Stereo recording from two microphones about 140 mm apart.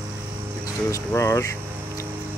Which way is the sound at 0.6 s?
20° left (ahead or behind).